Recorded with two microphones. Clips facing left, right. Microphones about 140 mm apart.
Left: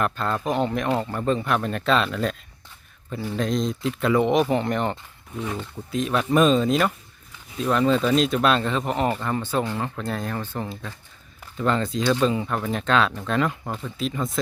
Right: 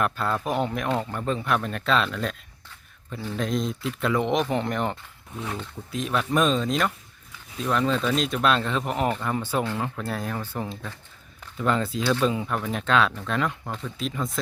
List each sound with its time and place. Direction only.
0.0 s speech: 5° right (ahead or behind)